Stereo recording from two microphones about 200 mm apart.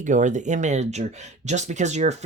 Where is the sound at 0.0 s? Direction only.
40° right (ahead or behind).